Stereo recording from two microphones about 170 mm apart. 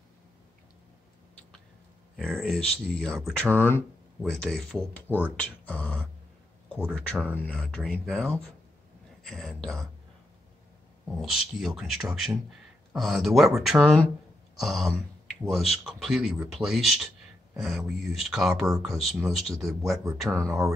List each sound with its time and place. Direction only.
2.1 s speech: centre (ahead or behind)
4.2 s speech: centre (ahead or behind)
9.2 s speech: centre (ahead or behind)
11.1 s speech: centre (ahead or behind)
20.2 s speech: 20° right (ahead or behind)